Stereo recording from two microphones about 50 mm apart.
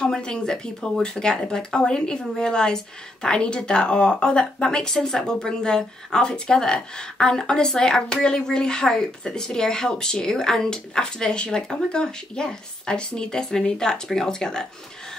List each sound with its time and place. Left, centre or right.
0.0 s speech: centre